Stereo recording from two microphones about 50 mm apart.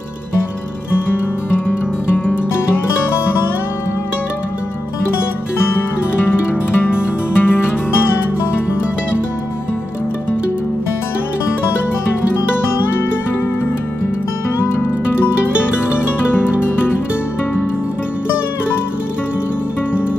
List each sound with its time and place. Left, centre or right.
1.7 s music: left
6.8 s music: left
16.3 s music: left